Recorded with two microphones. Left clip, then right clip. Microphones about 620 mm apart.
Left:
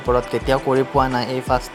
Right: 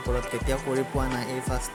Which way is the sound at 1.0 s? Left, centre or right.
Right.